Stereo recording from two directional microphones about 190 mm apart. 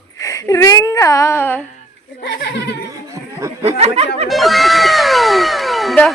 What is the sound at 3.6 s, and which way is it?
Speech, 35° right (ahead or behind).